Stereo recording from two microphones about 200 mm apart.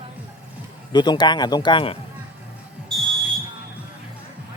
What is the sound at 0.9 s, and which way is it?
Speech, 20° left (ahead or behind).